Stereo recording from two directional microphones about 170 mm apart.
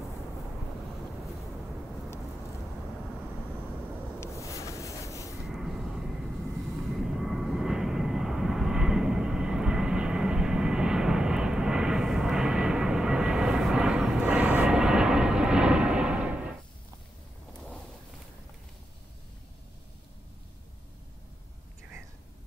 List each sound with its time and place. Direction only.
4.2 s rub: 20° left (ahead or behind)
5.5 s vehicle: centre (ahead or behind)
7.0 s vehicle: centre (ahead or behind)